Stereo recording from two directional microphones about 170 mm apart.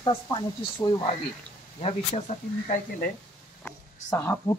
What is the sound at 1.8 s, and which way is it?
Speech, 40° left (ahead or behind).